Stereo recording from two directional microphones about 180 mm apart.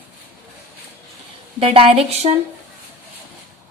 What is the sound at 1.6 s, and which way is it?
Speech, 30° right (ahead or behind).